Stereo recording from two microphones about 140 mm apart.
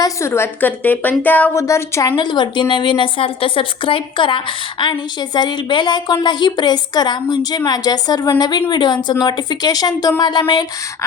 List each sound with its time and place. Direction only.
0.0 s a woman's voice: 20° left (ahead or behind)